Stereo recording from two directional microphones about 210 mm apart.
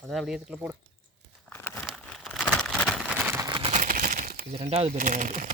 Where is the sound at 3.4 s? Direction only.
25° right (ahead or behind); by 4.6 s 40° right (ahead or behind).